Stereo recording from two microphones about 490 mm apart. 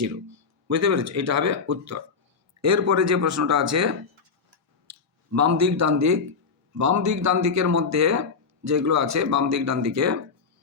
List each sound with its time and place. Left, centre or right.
0.7 s speech: right